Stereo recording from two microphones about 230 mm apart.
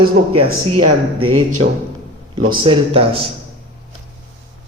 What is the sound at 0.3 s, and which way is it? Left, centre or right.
Speech, right.